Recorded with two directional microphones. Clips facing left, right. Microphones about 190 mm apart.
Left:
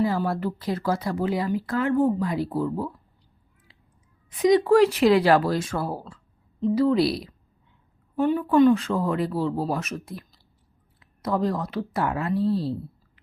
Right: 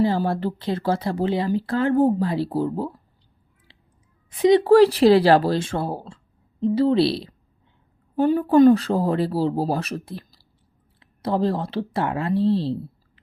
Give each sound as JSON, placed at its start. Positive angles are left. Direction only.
{"t": 0.0, "sound": "speech", "side_deg": -30}
{"t": 4.4, "sound": "speech", "side_deg": -30}